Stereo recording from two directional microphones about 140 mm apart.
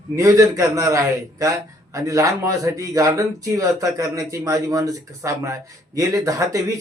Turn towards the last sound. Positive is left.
turn(degrees=-25)  # may be behind; listen again after turning